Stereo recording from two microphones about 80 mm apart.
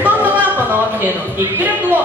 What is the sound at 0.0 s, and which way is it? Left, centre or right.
Music, right.